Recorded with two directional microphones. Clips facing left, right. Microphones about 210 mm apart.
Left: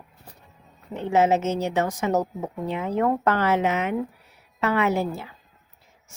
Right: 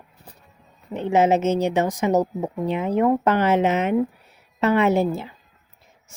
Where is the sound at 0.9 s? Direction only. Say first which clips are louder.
Right 2 dB; 20° right (ahead or behind).